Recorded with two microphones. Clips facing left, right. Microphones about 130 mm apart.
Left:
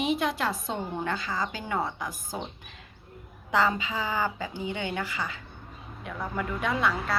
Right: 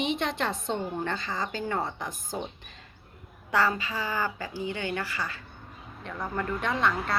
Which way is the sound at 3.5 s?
15° left (ahead or behind).